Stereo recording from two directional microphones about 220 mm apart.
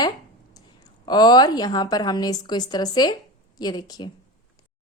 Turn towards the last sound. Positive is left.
turn(degrees=20)  # may be behind; listen again after turning